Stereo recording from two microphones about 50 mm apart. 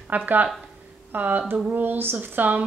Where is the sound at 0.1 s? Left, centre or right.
Right.